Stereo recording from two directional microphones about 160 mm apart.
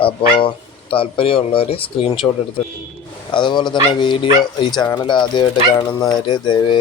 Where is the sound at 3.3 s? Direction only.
30° left (ahead or behind).